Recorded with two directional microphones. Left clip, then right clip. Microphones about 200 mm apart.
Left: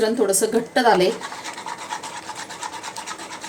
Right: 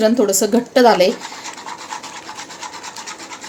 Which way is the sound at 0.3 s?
40° right (ahead or behind).